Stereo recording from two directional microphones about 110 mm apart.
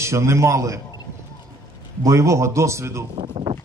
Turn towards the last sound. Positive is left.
turn(degrees=-60)  # may be behind; listen again after turning